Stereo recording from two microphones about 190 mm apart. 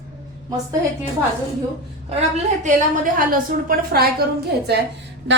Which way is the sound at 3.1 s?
45° right (ahead or behind).